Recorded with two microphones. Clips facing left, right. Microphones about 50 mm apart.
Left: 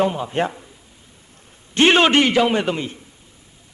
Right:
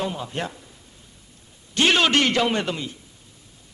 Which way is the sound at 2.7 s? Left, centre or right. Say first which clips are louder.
Left 5 dB; left.